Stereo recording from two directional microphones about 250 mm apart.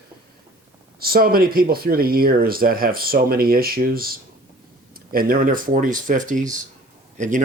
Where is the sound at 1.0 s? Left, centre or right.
Right.